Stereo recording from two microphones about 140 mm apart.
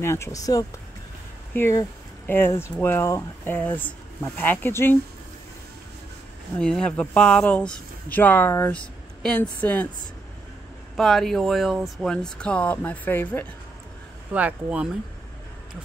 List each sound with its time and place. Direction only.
0.0 s speech: 20° left (ahead or behind)
6.6 s speech: 5° left (ahead or behind)
11.0 s speech: centre (ahead or behind)
14.3 s speech: 10° right (ahead or behind)